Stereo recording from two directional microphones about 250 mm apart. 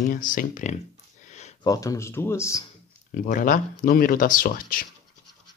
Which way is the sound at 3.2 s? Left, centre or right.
Left.